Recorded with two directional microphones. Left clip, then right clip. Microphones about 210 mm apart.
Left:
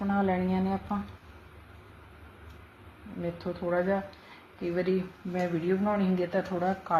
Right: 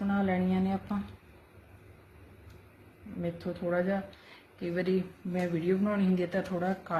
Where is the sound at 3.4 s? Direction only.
30° right (ahead or behind).